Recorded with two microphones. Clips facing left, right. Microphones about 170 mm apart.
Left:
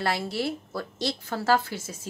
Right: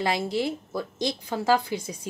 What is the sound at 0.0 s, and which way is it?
Speech, 15° right (ahead or behind).